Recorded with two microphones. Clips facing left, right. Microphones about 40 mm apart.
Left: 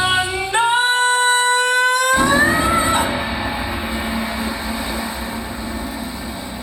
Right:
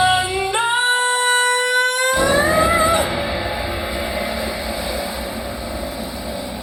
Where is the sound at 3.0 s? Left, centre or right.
Left.